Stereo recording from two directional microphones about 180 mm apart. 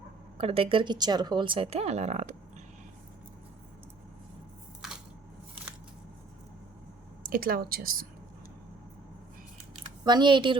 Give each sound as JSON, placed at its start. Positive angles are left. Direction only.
{"t": 0.3, "sound": "speech", "side_deg": -30}
{"t": 7.2, "sound": "speech", "side_deg": -50}
{"t": 10.0, "sound": "speech", "side_deg": -25}